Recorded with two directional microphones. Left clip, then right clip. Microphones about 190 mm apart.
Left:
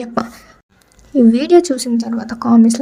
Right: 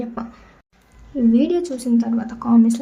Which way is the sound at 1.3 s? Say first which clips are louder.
Left 7 dB; 40° left (ahead or behind).